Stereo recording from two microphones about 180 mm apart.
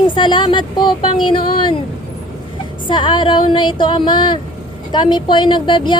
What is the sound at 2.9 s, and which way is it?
Speech, 25° left (ahead or behind).